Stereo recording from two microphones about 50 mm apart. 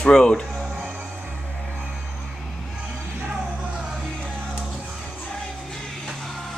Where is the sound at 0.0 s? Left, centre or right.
Centre.